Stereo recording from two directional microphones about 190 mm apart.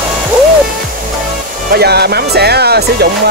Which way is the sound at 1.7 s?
60° right (ahead or behind).